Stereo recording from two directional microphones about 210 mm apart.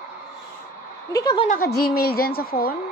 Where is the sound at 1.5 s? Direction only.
45° left (ahead or behind).